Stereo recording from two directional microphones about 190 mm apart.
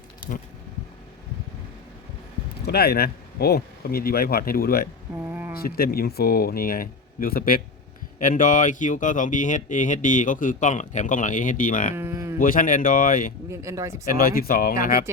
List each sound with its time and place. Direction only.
2.6 s speech: 55° left (ahead or behind)
5.2 s a sound: 10° right (ahead or behind)
5.5 s speech: 50° left (ahead or behind)
11.9 s a sound: 15° right (ahead or behind)
12.4 s speech: 45° left (ahead or behind)
13.5 s speech: 15° right (ahead or behind)
14.1 s speech: 50° left (ahead or behind)